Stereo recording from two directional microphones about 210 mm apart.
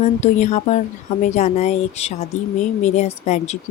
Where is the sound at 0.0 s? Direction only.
35° left (ahead or behind).